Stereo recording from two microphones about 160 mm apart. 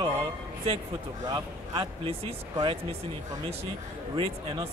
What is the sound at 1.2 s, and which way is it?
Speech, 25° right (ahead or behind).